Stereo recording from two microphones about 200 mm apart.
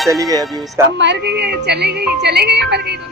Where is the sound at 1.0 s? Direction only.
60° right (ahead or behind).